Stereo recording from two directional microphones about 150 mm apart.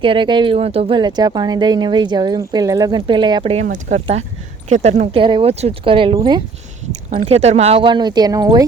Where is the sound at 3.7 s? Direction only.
55° right (ahead or behind); by 6.1 s 35° right (ahead or behind).